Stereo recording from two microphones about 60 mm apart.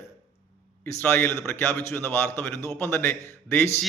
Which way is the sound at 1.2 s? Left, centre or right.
Left.